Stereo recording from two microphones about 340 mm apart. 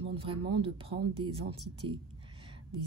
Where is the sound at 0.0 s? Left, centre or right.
Centre.